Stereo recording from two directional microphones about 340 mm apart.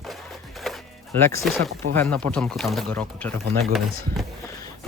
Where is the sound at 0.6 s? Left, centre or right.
Centre.